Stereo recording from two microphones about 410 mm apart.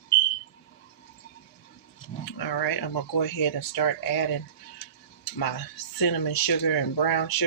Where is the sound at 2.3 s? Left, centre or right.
Left.